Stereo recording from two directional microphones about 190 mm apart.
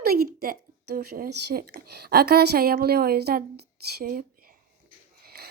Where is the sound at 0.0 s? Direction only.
50° right (ahead or behind).